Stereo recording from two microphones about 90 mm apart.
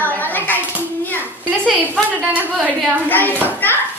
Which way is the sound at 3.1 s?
20° left (ahead or behind).